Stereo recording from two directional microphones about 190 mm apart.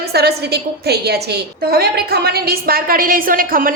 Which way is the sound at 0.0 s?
55° right (ahead or behind).